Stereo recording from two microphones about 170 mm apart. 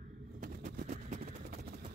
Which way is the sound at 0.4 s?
50° right (ahead or behind).